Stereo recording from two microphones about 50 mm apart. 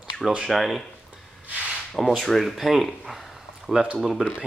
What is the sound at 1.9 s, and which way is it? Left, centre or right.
Speech, centre.